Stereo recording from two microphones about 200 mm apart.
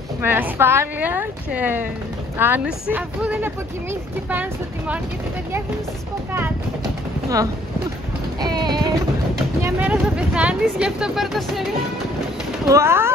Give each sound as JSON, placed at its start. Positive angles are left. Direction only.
{"t": 0.2, "sound": "speech", "side_deg": -10}
{"t": 8.4, "sound": "a sound", "side_deg": -20}
{"t": 9.6, "sound": "speech", "side_deg": -10}
{"t": 12.6, "sound": "speech", "side_deg": -15}